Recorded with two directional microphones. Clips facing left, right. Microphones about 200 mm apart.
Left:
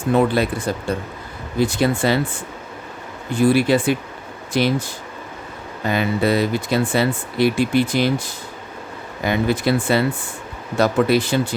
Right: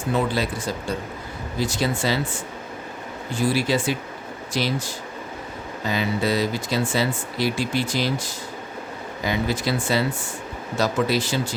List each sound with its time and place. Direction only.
0.1 s speech: 55° left (ahead or behind)
5.8 s speech: 55° left (ahead or behind)